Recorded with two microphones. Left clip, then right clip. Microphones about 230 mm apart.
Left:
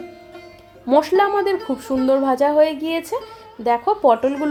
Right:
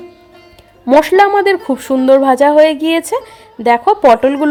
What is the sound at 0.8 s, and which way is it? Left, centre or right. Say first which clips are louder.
A woman's voice: right 7 dB; right.